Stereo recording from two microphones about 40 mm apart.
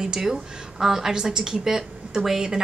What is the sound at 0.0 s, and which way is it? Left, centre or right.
A woman's voice, centre.